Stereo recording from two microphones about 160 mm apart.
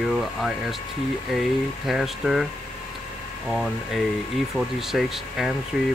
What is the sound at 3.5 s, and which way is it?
Speech, centre (ahead or behind).